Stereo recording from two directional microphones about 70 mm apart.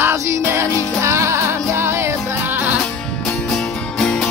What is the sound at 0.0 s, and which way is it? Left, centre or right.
Music, right.